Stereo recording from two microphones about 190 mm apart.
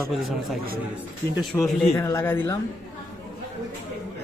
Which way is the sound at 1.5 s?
15° left (ahead or behind).